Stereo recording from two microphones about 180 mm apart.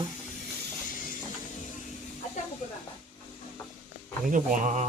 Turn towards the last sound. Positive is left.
turn(degrees=-45)  # may be behind; listen again after turning